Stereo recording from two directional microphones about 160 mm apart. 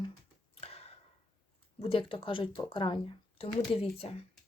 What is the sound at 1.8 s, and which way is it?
Speech, 35° left (ahead or behind).